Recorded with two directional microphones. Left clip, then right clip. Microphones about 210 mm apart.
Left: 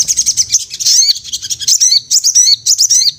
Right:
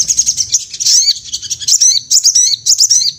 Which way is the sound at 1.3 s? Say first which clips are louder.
Left 1 dB; 45° left (ahead or behind).